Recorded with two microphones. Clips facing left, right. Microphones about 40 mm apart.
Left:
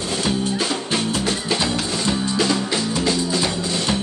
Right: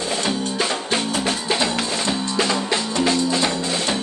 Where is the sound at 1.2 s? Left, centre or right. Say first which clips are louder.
Even; right.